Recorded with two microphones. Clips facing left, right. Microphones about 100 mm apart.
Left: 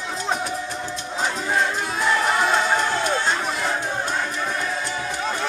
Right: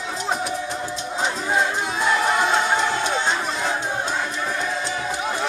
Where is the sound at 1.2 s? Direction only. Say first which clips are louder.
Even; 20° right (ahead or behind).